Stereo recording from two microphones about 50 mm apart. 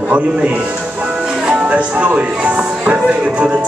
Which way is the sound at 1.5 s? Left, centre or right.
Right.